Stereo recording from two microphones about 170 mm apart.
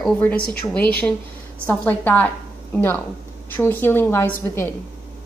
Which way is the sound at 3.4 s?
10° left (ahead or behind).